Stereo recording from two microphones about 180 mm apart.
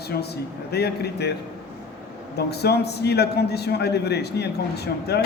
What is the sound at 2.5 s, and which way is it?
A man's voice, 65° left (ahead or behind).